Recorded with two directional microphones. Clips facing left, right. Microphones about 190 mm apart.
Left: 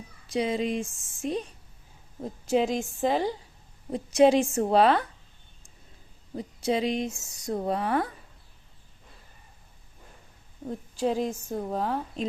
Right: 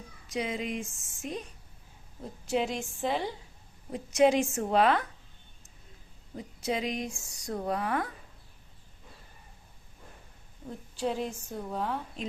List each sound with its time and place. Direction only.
0.3 s speech: 30° left (ahead or behind)
2.5 s speech: 40° left (ahead or behind)
6.3 s speech: 30° left (ahead or behind)
10.7 s a woman's voice: 45° left (ahead or behind)